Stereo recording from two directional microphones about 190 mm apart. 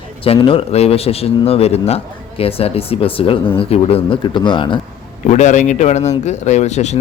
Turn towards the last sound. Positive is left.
turn(degrees=35)  # may be behind; listen again after turning